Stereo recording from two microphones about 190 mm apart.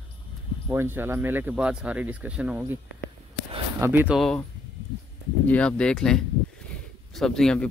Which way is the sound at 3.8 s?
10° right (ahead or behind).